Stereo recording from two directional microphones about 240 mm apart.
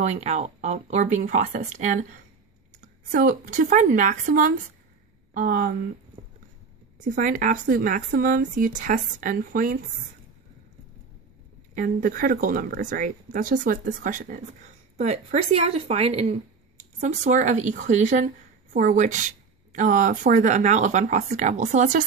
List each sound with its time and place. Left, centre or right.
0.0 s speech: right
7.1 s speech: right
11.7 s speech: right